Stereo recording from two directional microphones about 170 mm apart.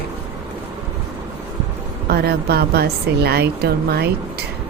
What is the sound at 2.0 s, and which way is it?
A woman's voice, 70° right (ahead or behind).